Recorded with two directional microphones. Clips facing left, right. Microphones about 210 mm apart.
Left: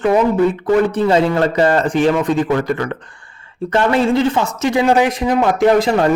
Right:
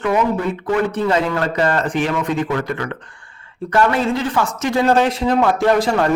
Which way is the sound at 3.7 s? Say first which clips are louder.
Left 3 dB; 25° left (ahead or behind).